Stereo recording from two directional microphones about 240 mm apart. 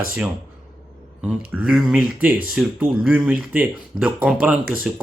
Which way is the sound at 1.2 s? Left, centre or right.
Centre.